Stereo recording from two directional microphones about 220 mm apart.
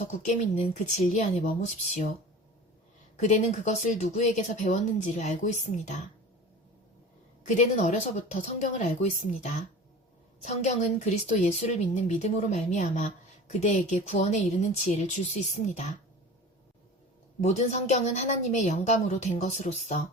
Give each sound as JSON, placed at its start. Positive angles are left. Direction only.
{"t": 0.3, "sound": "a woman's voice", "side_deg": 30}
{"t": 3.2, "sound": "a woman's voice", "side_deg": 35}
{"t": 7.4, "sound": "a woman's voice", "side_deg": 30}
{"t": 17.4, "sound": "a woman's voice", "side_deg": 30}